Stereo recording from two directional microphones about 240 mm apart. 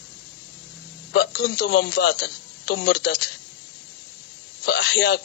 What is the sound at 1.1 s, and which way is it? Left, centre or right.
Speech, left.